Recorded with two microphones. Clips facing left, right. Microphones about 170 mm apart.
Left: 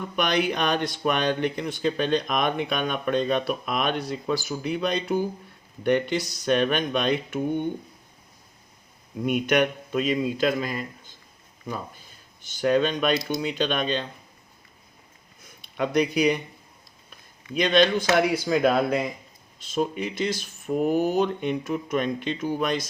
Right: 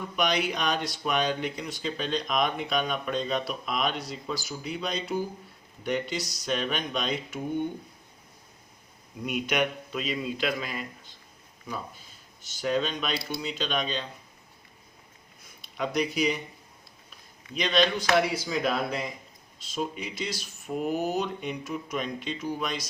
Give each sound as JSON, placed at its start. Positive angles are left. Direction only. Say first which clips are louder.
{"t": 0.2, "sound": "speech", "louder": "left 3 dB", "side_deg": 55}
{"t": 9.2, "sound": "speech", "louder": "left 6 dB", "side_deg": 55}
{"t": 12.6, "sound": "speech", "louder": "left 7 dB", "side_deg": 55}
{"t": 15.8, "sound": "speech", "louder": "left 5 dB", "side_deg": 55}
{"t": 17.6, "sound": "speech", "louder": "left 5 dB", "side_deg": 50}